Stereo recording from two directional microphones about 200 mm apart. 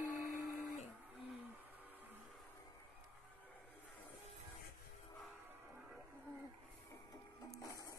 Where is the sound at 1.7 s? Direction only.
10° right (ahead or behind).